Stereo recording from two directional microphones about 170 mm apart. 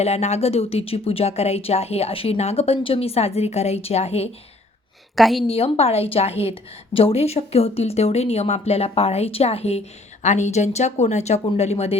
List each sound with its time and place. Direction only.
0.0 s a woman's voice: 40° left (ahead or behind)
5.1 s a woman's voice: centre (ahead or behind)
5.5 s a woman's voice: 35° left (ahead or behind)